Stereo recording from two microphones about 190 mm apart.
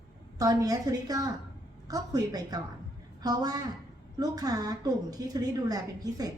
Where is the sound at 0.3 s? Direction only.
20° right (ahead or behind).